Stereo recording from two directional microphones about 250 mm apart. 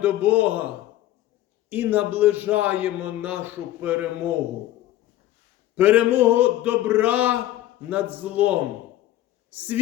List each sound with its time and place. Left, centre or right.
0.0 s a man's voice: centre
1.7 s a man's voice: centre
5.7 s a man's voice: centre